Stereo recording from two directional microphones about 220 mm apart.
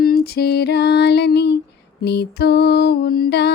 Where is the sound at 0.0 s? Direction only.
45° left (ahead or behind).